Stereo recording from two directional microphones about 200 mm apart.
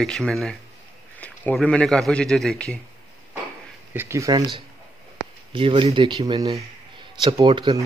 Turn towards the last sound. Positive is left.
turn(degrees=-25)  # may be behind; listen again after turning